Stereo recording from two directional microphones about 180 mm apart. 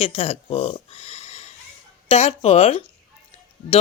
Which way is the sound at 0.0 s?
35° left (ahead or behind).